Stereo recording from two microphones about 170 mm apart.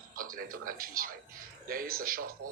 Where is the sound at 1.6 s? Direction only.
55° right (ahead or behind).